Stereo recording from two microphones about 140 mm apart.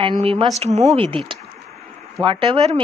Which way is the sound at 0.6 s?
50° right (ahead or behind).